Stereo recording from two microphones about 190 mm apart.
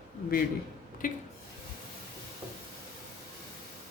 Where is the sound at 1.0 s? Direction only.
45° left (ahead or behind).